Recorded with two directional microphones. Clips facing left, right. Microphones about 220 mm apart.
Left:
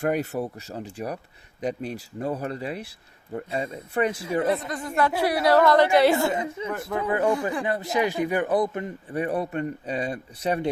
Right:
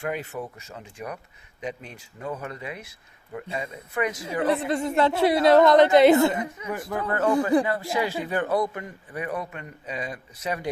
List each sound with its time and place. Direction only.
0.0 s speech: 40° left (ahead or behind)
4.7 s speech: 25° right (ahead or behind)
6.3 s speech: 25° left (ahead or behind)